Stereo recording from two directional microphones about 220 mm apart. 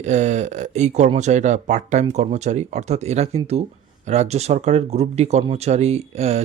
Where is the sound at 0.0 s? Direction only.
30° right (ahead or behind).